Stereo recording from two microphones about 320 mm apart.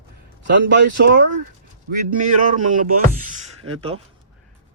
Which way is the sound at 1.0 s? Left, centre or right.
Right.